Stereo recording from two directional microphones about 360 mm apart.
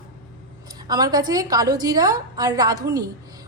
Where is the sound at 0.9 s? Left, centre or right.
Centre.